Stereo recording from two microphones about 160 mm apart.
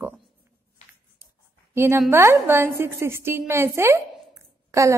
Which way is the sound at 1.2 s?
15° right (ahead or behind).